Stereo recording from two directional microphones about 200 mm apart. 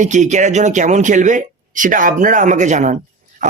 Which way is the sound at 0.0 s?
35° right (ahead or behind).